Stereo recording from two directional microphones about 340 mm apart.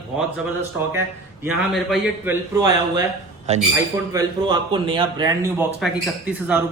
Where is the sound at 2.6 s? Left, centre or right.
Centre.